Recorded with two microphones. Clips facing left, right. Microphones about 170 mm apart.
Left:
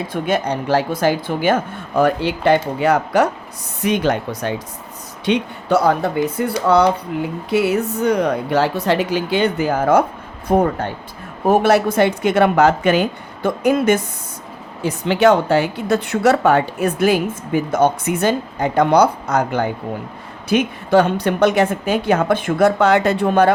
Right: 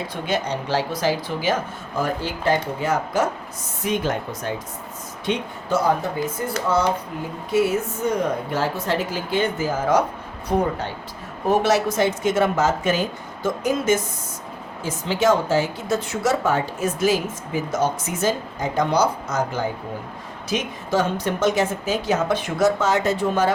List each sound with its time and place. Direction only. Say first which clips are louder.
0.1 s a woman's voice: left 6 dB; 55° left (ahead or behind)